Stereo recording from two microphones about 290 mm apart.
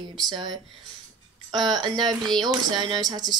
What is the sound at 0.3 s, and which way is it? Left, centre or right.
Speech, centre.